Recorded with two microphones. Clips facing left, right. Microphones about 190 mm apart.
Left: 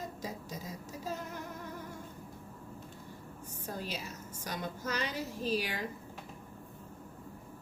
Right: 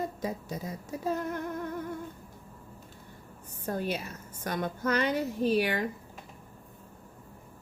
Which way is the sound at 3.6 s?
55° right (ahead or behind).